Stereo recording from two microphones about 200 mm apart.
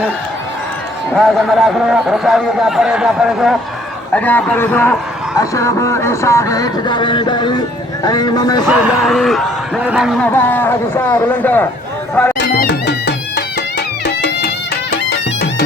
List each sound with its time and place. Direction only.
1.1 s speech: centre (ahead or behind); by 8.6 s 20° left (ahead or behind)
8.7 s speech: 5° right (ahead or behind)
10.3 s speech: 10° left (ahead or behind)
12.4 s music: 55° left (ahead or behind)